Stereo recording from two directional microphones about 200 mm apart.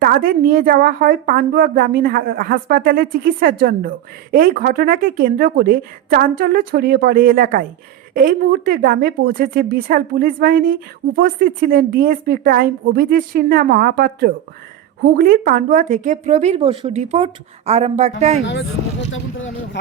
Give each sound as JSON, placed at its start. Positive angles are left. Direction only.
{"t": 0.0, "sound": "a woman's voice", "side_deg": -45}
{"t": 19.1, "sound": "speech", "side_deg": 75}